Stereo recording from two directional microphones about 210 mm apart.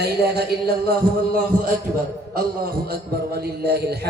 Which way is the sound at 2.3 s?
45° right (ahead or behind).